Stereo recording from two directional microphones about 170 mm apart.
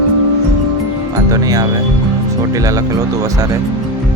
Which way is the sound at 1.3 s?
20° right (ahead or behind).